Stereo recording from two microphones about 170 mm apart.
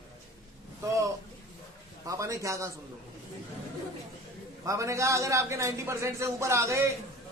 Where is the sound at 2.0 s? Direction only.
20° right (ahead or behind).